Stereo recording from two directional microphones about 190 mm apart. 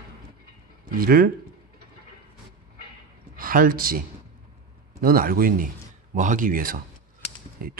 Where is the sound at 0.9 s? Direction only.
50° right (ahead or behind).